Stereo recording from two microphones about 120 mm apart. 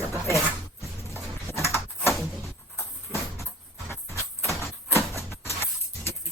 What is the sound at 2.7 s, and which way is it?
Vehicle, 20° left (ahead or behind).